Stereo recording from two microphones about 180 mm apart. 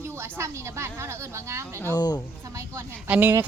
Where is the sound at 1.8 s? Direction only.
15° left (ahead or behind).